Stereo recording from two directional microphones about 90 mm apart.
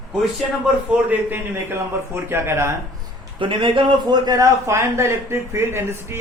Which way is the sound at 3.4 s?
70° right (ahead or behind).